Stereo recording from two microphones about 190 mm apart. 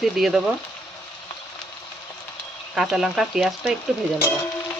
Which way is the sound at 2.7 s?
Centre (ahead or behind).